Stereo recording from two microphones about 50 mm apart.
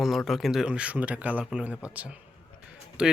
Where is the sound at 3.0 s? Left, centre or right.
Centre.